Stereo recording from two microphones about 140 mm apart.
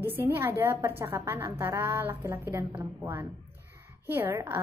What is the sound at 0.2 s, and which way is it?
A woman's voice, 15° right (ahead or behind).